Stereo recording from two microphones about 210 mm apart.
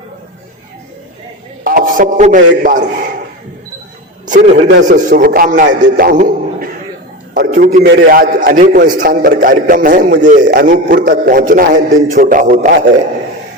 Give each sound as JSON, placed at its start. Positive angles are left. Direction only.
{"t": 1.6, "sound": "a man's voice", "side_deg": -40}
{"t": 4.3, "sound": "a man's voice", "side_deg": -35}
{"t": 5.6, "sound": "a man's voice", "side_deg": -50}
{"t": 7.9, "sound": "a man's voice", "side_deg": -50}